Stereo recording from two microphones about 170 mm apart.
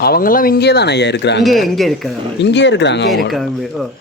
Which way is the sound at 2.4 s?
90° left.